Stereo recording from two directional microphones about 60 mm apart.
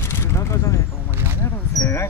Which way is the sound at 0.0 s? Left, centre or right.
Left.